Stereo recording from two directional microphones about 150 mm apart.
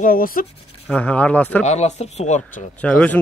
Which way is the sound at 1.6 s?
50° left (ahead or behind).